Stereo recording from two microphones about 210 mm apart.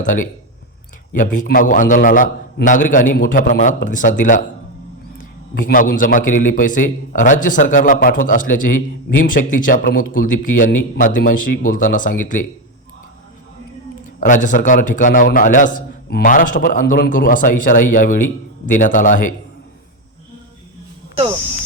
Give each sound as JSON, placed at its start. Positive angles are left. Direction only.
{"t": 0.0, "sound": "a man's voice", "side_deg": 40}
{"t": 14.2, "sound": "a man's voice", "side_deg": 35}